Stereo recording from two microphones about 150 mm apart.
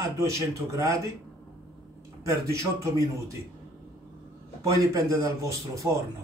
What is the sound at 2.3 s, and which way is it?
A man's voice, 20° right (ahead or behind).